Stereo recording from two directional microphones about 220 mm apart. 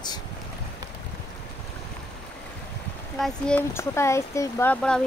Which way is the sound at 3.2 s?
5° left (ahead or behind).